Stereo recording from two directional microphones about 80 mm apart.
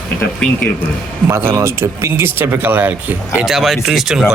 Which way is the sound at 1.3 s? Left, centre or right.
Right.